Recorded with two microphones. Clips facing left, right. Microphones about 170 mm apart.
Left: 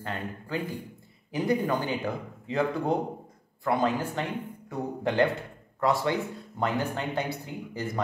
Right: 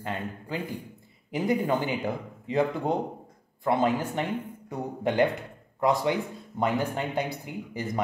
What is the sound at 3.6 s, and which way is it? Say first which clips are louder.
Speech: right 1 dB; 20° right (ahead or behind).